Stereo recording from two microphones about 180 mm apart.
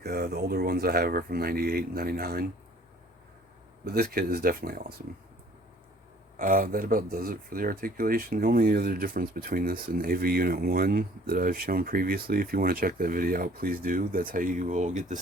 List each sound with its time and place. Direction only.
0.0 s speech: 60° right (ahead or behind)
3.9 s speech: 60° right (ahead or behind)
6.4 s speech: 50° right (ahead or behind)